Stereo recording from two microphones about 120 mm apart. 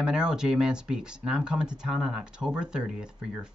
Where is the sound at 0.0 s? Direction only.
5° right (ahead or behind).